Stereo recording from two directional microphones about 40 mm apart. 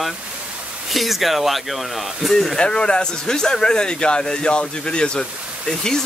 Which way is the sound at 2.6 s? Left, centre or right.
Left.